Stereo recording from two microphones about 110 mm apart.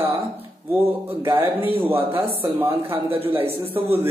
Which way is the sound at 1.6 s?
20° right (ahead or behind).